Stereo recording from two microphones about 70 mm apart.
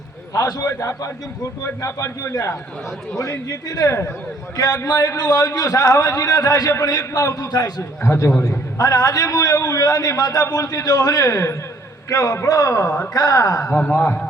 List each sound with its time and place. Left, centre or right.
0.3 s a man's voice: left
0.7 s a man's voice: left
3.8 s speech: left
4.5 s a man's voice: left
8.0 s speech: left
8.8 s a man's voice: left
13.1 s a man's voice: left
13.7 s a man's voice: left